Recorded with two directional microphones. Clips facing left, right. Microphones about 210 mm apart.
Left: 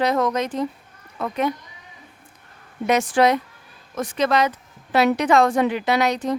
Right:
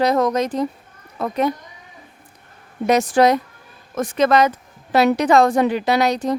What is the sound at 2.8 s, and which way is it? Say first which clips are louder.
A woman's voice: right 3 dB; 40° right (ahead or behind).